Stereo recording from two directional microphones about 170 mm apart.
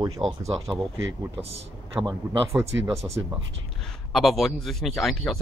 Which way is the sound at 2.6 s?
15° right (ahead or behind).